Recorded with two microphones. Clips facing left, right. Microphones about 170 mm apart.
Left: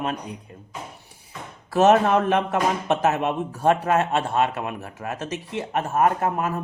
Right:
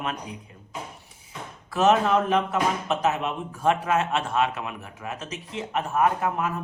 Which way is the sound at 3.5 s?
40° left (ahead or behind).